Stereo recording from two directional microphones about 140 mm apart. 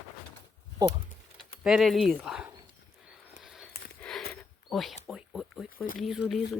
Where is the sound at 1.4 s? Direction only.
5° right (ahead or behind).